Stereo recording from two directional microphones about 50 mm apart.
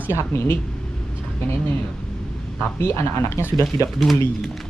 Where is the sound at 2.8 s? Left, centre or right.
Left.